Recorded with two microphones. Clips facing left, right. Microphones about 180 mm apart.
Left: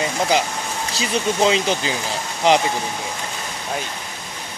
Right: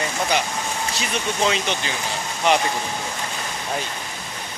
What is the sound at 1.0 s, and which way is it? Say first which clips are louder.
Speech: left 5 dB; 30° left (ahead or behind).